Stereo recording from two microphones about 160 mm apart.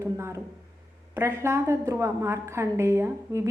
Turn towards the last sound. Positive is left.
turn(degrees=-15)  # may be behind; listen again after turning